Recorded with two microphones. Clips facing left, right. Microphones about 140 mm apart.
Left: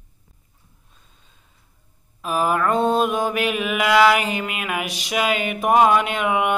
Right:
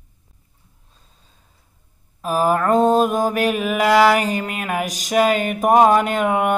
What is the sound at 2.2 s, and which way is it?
Mantra, 40° right (ahead or behind).